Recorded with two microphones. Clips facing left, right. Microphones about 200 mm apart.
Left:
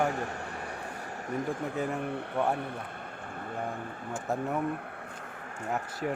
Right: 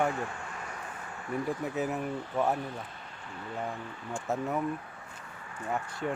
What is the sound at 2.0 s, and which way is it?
Speech, 65° left (ahead or behind).